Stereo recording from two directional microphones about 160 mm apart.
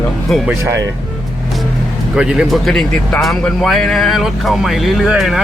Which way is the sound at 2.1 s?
5° right (ahead or behind).